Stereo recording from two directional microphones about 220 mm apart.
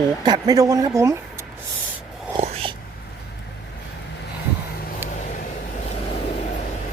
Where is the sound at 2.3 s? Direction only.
25° right (ahead or behind).